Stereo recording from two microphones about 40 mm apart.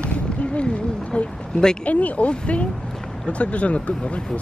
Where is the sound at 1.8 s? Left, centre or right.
Left.